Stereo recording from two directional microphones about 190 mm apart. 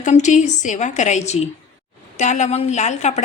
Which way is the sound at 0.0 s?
40° left (ahead or behind).